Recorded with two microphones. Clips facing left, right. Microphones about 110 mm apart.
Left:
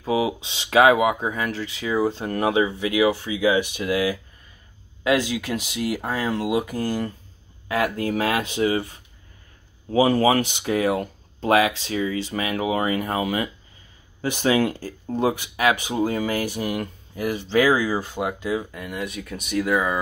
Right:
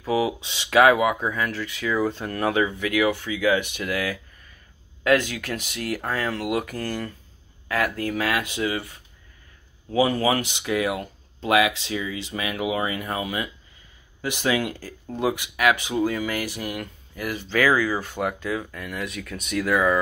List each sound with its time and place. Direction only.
0.0 s speech: 25° left (ahead or behind)